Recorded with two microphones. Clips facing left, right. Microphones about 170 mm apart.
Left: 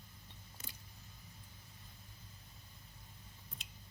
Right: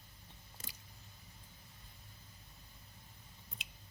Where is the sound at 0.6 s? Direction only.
30° right (ahead or behind).